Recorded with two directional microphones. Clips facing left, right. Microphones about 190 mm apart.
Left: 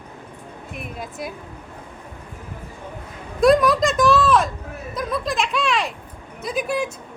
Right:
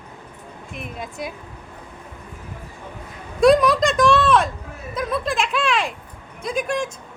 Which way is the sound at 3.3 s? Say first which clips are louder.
Right 1 dB; centre (ahead or behind).